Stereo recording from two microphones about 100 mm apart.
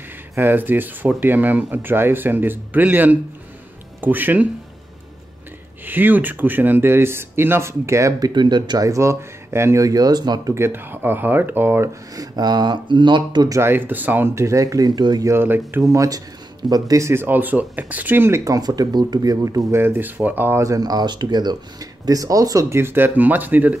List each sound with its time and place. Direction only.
0.4 s speech: 20° right (ahead or behind)
5.9 s speech: 20° right (ahead or behind)
8.2 s speech: 45° right (ahead or behind)
8.8 s speech: 30° right (ahead or behind)
10.5 s speech: 25° right (ahead or behind)
12.2 s speech: 45° right (ahead or behind)
13.5 s speech: 25° right (ahead or behind); by 15.2 s 45° right (ahead or behind)
15.2 s speech: 20° right (ahead or behind)
15.9 s speech: 35° right (ahead or behind)
19.8 s speech: 20° right (ahead or behind); by 22.8 s 35° right (ahead or behind)
22.8 s speech: 25° right (ahead or behind)